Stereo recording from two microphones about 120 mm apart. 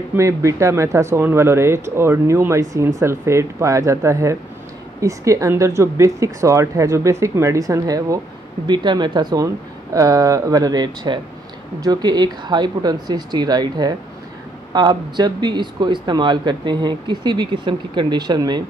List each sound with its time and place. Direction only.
0.1 s speech: 25° right (ahead or behind)